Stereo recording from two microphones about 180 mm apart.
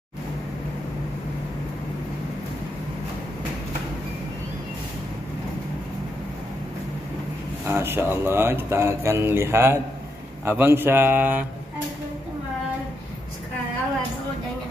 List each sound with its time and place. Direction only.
7.6 s speech: 15° right (ahead or behind)